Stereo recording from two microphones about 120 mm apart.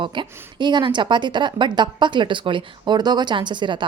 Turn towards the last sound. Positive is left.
turn(degrees=-40)  # may be behind; listen again after turning